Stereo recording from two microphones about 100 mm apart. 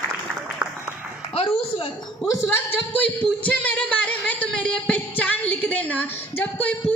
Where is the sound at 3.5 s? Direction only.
10° left (ahead or behind).